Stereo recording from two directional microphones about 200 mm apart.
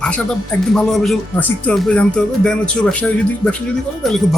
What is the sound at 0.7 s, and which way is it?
Speech, centre (ahead or behind).